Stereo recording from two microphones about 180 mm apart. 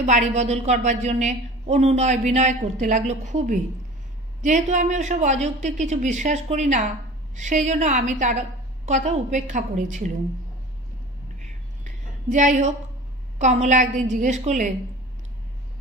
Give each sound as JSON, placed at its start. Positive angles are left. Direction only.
{"t": 0.0, "sound": "a woman's voice", "side_deg": -40}
{"t": 11.8, "sound": "a sound", "side_deg": -45}
{"t": 13.4, "sound": "a woman's voice", "side_deg": -40}